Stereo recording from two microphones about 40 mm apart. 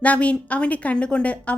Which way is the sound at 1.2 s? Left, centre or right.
Left.